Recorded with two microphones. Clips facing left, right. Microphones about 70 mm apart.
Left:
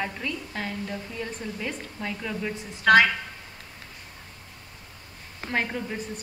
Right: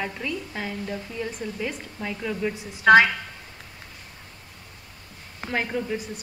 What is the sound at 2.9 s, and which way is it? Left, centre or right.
Speech, centre.